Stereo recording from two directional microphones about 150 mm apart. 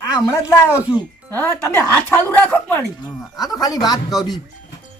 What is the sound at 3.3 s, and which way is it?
Speech, 25° left (ahead or behind).